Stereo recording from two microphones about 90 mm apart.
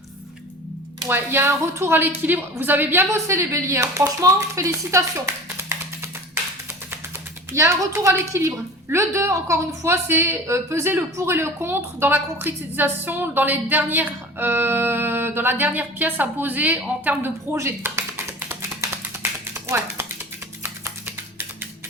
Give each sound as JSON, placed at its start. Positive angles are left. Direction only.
{"t": 1.0, "sound": "a woman's voice", "side_deg": -25}
{"t": 7.5, "sound": "a woman's voice", "side_deg": -35}
{"t": 17.5, "sound": "tap", "side_deg": -30}